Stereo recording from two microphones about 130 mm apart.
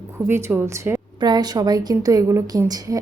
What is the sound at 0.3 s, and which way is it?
Speech, 20° right (ahead or behind).